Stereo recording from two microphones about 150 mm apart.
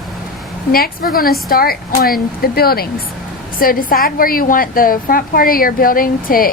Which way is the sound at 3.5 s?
70° left (ahead or behind).